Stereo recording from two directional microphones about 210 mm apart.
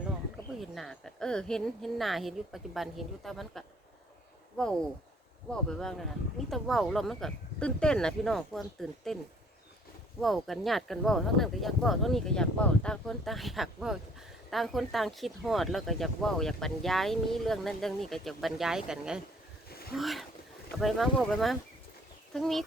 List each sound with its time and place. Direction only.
0.6 s speech: centre (ahead or behind)
10.2 s speech: centre (ahead or behind)
19.6 s a sound: 45° left (ahead or behind)
20.0 s speech: centre (ahead or behind)